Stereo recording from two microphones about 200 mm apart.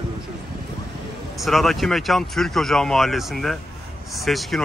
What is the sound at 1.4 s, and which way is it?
Speech, centre (ahead or behind).